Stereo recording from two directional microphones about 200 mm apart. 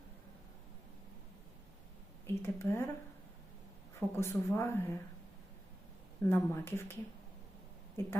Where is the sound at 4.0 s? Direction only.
10° left (ahead or behind).